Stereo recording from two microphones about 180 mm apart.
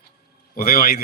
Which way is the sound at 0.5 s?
55° left (ahead or behind).